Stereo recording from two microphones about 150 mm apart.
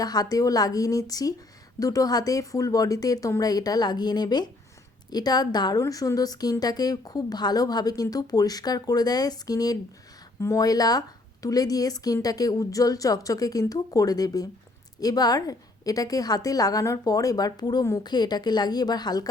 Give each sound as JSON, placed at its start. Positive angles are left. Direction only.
{"t": 0.0, "sound": "a woman's voice", "side_deg": 25}